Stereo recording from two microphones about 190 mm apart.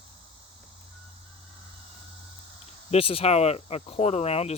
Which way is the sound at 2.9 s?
30° left (ahead or behind).